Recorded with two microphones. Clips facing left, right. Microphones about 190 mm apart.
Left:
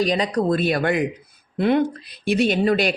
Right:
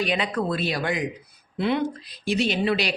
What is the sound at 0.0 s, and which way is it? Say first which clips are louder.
Speech: left 5 dB; 40° left (ahead or behind).